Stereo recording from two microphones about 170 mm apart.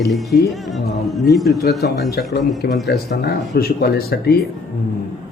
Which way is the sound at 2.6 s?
85° left.